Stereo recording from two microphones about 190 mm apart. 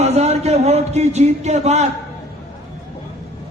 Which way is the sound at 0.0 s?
35° right (ahead or behind).